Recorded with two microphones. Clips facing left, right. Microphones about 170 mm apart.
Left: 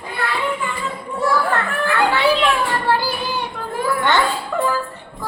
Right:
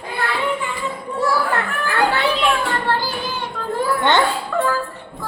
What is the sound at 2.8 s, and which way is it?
Child singing, 10° left (ahead or behind).